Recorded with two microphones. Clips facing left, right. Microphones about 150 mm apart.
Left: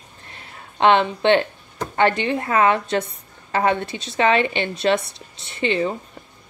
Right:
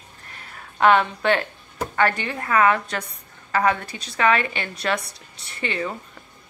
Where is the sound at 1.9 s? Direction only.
25° left (ahead or behind).